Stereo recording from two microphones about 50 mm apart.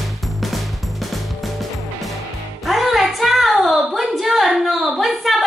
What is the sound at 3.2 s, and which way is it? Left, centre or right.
Child singing, centre.